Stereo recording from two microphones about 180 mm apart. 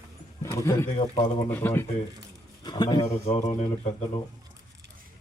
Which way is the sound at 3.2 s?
40° left (ahead or behind).